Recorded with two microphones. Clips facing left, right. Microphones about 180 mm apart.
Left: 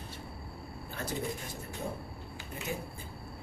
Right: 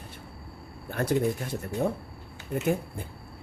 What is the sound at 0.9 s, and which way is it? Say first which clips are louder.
Speech: right 11 dB; 65° right (ahead or behind).